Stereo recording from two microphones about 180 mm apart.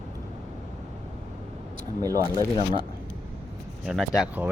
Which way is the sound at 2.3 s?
25° left (ahead or behind).